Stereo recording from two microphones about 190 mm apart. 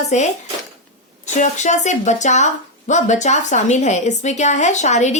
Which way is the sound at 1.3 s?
40° left (ahead or behind).